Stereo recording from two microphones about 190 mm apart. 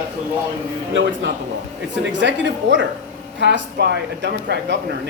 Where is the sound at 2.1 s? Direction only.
70° right (ahead or behind).